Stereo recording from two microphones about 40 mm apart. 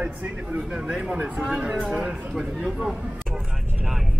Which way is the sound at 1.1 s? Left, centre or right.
Right.